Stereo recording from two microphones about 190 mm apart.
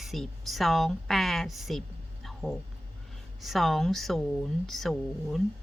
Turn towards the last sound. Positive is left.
turn(degrees=0)  # may be behind; listen again after turning